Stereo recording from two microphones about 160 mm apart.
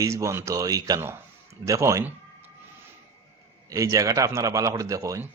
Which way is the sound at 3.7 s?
20° right (ahead or behind).